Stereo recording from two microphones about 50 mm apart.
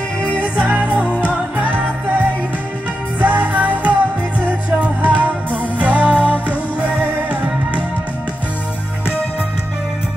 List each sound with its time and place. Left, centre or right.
0.2 s music: left
0.7 s music: right
3.2 s music: right